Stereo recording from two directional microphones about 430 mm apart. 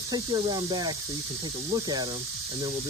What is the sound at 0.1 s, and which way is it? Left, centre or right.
Speech, centre.